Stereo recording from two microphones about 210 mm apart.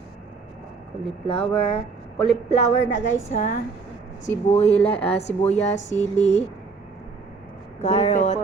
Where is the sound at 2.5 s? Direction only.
35° left (ahead or behind).